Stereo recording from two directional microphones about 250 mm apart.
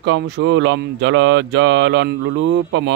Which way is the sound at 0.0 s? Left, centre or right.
Right.